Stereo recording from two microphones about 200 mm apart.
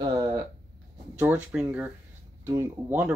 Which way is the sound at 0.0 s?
20° right (ahead or behind).